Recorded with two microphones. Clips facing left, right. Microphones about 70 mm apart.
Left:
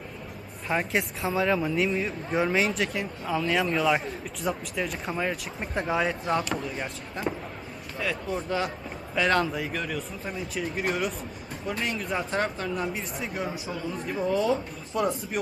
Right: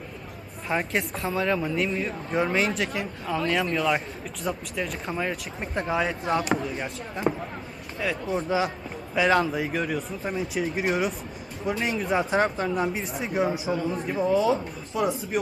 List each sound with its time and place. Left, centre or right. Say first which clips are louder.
0.7 s speech: even; centre
12.3 s speech: right 4 dB; centre
14.0 s speech: right 2 dB; centre